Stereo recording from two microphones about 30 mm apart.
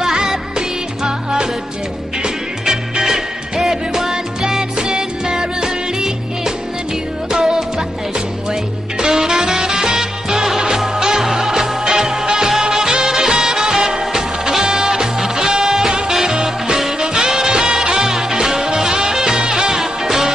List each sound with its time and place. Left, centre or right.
0.0 s music: centre
8.5 s music: right
17.1 s music: right
19.3 s music: right
19.7 s music: centre